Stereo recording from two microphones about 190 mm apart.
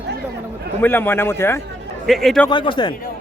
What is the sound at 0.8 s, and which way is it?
Speech, 10° left (ahead or behind).